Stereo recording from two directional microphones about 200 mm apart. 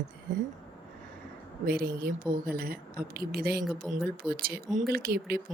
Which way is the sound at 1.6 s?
50° right (ahead or behind).